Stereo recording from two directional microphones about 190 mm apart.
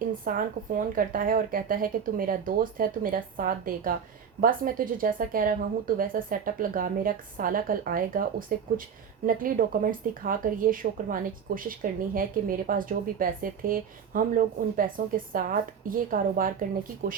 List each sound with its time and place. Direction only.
0.3 s speech: 45° right (ahead or behind)